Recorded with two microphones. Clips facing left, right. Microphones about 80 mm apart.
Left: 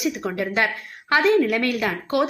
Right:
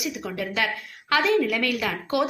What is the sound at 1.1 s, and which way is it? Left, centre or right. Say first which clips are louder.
A woman's voice: left 4 dB; left.